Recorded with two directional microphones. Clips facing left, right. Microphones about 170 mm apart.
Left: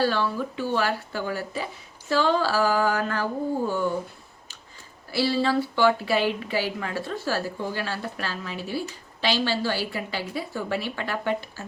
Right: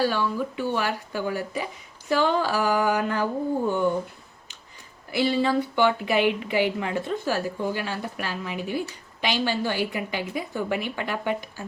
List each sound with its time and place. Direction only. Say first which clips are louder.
0.0 s speech: even; 15° right (ahead or behind)
5.1 s speech: right 1 dB; 20° right (ahead or behind)